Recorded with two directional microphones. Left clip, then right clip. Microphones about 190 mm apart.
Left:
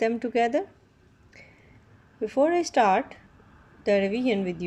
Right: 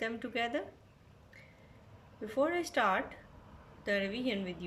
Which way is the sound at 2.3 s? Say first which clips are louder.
Left 9 dB; 30° left (ahead or behind).